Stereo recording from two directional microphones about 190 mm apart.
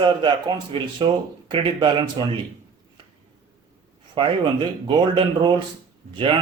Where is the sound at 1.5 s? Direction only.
25° right (ahead or behind).